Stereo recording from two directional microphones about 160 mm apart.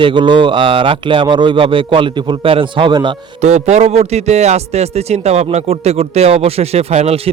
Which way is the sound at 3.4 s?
45° right (ahead or behind).